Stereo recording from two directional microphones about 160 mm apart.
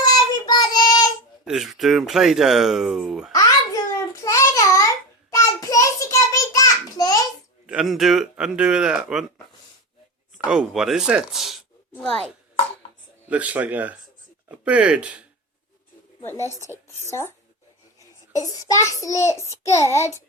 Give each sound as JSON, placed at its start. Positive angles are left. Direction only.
{"t": 0.0, "sound": "child singing", "side_deg": 25}
{"t": 1.5, "sound": "speech", "side_deg": 0}
{"t": 3.3, "sound": "a sound", "side_deg": 20}
{"t": 5.3, "sound": "child singing", "side_deg": 20}
{"t": 7.7, "sound": "speech", "side_deg": 0}
{"t": 10.3, "sound": "speech", "side_deg": -5}
{"t": 13.2, "sound": "speech", "side_deg": -10}
{"t": 17.1, "sound": "speech", "side_deg": 15}
{"t": 18.3, "sound": "a child's voice", "side_deg": 20}